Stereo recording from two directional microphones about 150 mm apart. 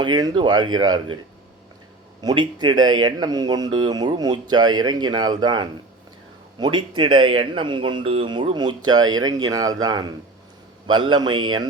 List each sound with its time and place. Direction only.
0.0 s speech: 25° right (ahead or behind)
2.2 s speech: 30° right (ahead or behind)